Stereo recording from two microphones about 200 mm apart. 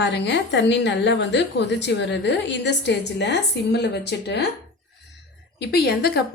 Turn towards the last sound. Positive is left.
turn(degrees=50)  # may be behind; listen again after turning